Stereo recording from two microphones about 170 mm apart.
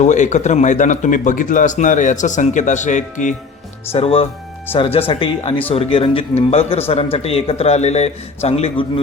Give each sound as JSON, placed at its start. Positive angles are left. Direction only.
{"t": 0.0, "sound": "speech", "side_deg": 45}
{"t": 3.9, "sound": "a man's voice", "side_deg": 35}